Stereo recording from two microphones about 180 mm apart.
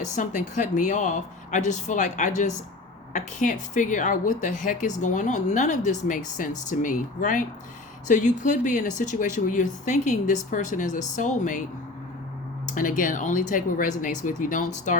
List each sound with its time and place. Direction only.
0.2 s speech: 45° left (ahead or behind)
12.6 s speech: 45° left (ahead or behind)